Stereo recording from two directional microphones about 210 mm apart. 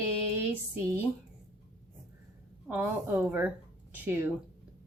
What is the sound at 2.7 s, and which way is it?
A woman's voice, 10° right (ahead or behind).